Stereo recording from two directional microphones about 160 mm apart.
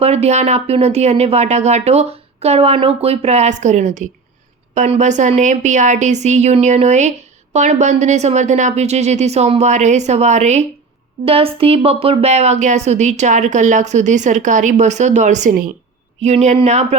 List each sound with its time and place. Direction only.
0.0 s speech: 40° right (ahead or behind)
11.3 s speech: 35° right (ahead or behind)